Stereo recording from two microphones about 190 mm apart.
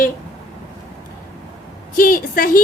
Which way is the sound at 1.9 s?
45° left (ahead or behind).